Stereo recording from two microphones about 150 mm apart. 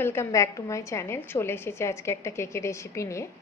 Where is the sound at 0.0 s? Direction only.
15° left (ahead or behind).